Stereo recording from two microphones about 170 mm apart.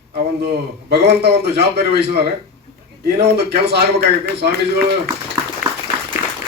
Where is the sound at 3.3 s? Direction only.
75° right (ahead or behind).